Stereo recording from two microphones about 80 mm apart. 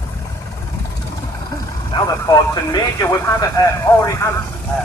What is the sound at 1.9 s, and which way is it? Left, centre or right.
Speech, left.